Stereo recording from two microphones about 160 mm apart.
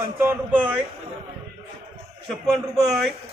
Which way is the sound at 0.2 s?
10° right (ahead or behind).